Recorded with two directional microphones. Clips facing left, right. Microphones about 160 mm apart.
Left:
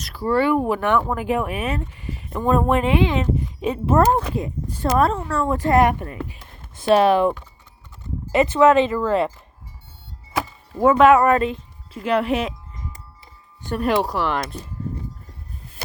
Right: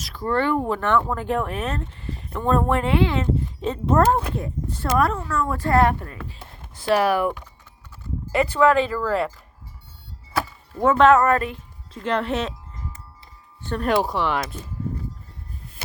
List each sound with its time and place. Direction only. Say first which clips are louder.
0.0 s speech: left 3 dB; 5° left (ahead or behind); by 5.5 s 30° left (ahead or behind)
5.5 s speech: left 2 dB; 20° left (ahead or behind)
10.8 s speech: left 2 dB; 10° left (ahead or behind)
13.6 s wind chime: left 2 dB; 15° left (ahead or behind)
13.8 s speech: left 1 dB; centre (ahead or behind)